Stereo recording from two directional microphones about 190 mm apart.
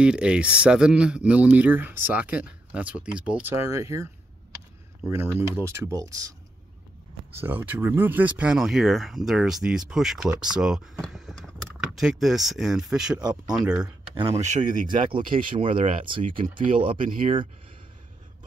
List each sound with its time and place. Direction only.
0.0 s speech: 5° right (ahead or behind)
7.3 s speech: 10° right (ahead or behind)
14.1 s speech: 25° right (ahead or behind)
14.4 s speech: 40° right (ahead or behind)
15.0 s speech: 25° right (ahead or behind)